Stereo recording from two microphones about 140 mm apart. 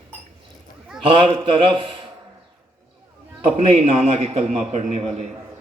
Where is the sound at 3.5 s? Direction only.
45° right (ahead or behind).